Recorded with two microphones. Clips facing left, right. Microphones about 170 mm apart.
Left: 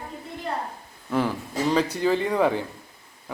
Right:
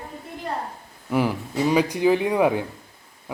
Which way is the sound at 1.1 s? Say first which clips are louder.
Right 2 dB; 15° right (ahead or behind).